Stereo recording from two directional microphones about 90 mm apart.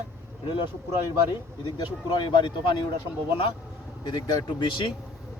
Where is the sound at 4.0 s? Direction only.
60° left (ahead or behind).